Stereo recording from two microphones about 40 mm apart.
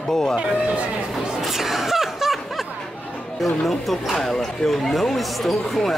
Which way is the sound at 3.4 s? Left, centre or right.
Centre.